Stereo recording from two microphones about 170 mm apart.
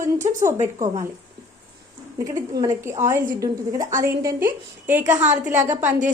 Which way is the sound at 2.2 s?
20° right (ahead or behind).